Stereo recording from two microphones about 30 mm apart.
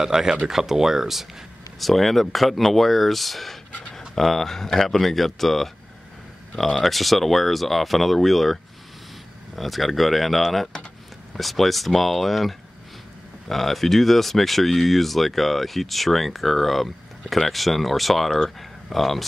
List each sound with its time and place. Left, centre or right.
0.0 s speech: centre
1.8 s speech: centre
9.6 s speech: centre